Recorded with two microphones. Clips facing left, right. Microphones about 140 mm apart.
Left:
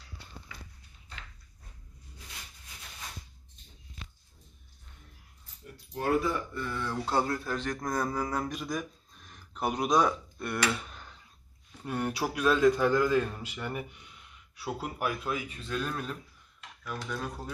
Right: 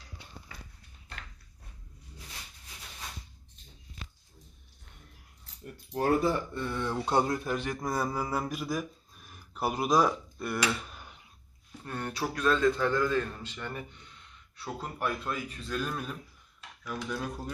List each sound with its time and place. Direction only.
0.5 s dog: 40° right (ahead or behind)
5.9 s speech: 35° right (ahead or behind); by 11.0 s centre (ahead or behind)
11.0 s a sound: 15° right (ahead or behind)
11.8 s a man's voice: 10° left (ahead or behind)
16.8 s dishes: centre (ahead or behind)